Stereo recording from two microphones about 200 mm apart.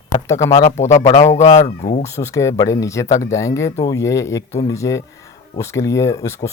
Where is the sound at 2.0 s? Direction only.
15° left (ahead or behind).